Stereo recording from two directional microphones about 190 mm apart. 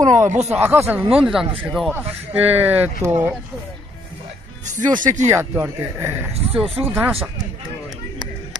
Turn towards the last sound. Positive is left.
turn(degrees=-10)  # may be behind; listen again after turning